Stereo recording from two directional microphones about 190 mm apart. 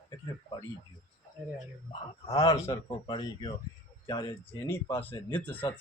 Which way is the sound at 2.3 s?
15° left (ahead or behind).